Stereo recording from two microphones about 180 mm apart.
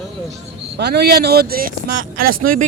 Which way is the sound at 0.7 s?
65° right (ahead or behind).